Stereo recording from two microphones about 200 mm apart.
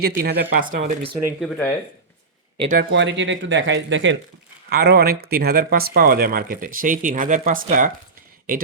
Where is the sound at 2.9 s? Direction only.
65° right (ahead or behind).